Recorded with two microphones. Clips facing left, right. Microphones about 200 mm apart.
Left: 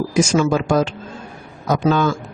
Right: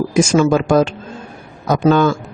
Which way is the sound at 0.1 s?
55° right (ahead or behind).